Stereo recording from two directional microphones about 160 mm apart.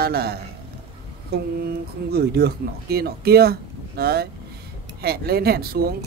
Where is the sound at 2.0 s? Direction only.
85° right.